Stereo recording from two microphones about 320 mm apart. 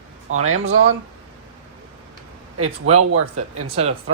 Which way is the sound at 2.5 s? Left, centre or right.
Right.